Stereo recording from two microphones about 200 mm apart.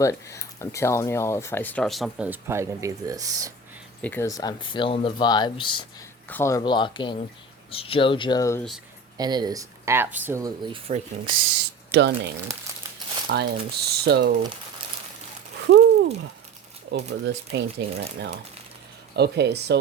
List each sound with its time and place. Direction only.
0.0 s speech: 15° left (ahead or behind); by 3.5 s 15° right (ahead or behind)
4.0 s speech: 10° left (ahead or behind)
6.2 s speech: 10° left (ahead or behind)
9.1 s speech: 20° right (ahead or behind)
11.6 s speech: 60° right (ahead or behind)
15.6 s a sound: 60° right (ahead or behind)
16.9 s speech: 60° right (ahead or behind)
19.1 s speech: 55° right (ahead or behind)